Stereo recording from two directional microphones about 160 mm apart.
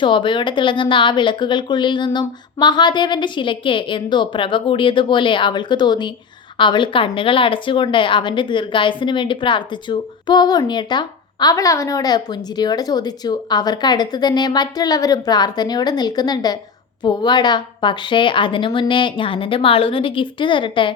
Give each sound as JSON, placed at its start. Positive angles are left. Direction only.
{"t": 0.0, "sound": "a woman's voice", "side_deg": 30}